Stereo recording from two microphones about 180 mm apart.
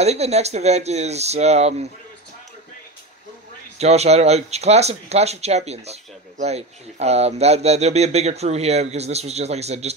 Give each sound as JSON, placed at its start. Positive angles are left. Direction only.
{"t": 0.0, "sound": "speech", "side_deg": -35}
{"t": 3.7, "sound": "speech", "side_deg": -35}